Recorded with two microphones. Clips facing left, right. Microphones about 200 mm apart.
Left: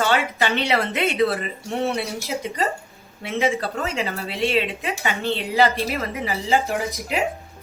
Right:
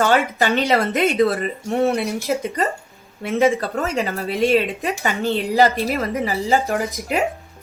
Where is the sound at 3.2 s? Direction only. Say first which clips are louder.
Right 5 dB; 45° right (ahead or behind).